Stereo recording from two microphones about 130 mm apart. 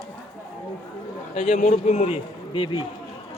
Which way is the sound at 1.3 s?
75° left (ahead or behind).